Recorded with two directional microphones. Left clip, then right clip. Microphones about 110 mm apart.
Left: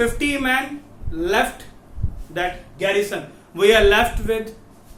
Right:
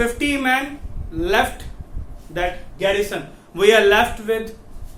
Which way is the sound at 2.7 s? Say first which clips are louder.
Even; 25° right (ahead or behind).